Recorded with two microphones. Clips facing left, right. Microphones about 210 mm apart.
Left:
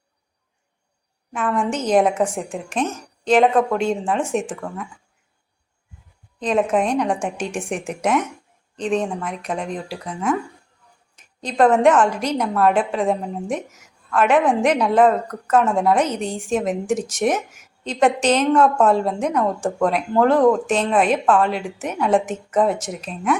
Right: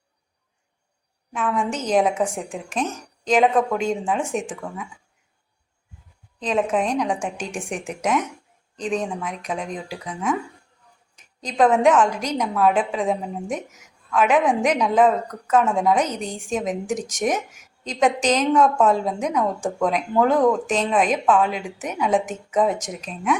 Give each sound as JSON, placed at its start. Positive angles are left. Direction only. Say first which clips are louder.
{"t": 1.3, "sound": "a woman's voice", "louder": "left 2 dB", "side_deg": 5}
{"t": 6.4, "sound": "a woman's voice", "louder": "left 3 dB", "side_deg": 5}
{"t": 11.4, "sound": "speech", "louder": "left 2 dB", "side_deg": 5}